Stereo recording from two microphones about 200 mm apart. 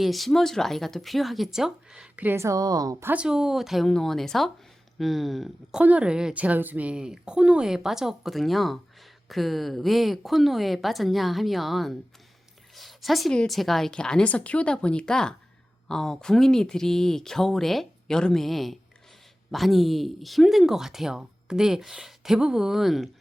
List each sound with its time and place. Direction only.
0.0 s speech: centre (ahead or behind)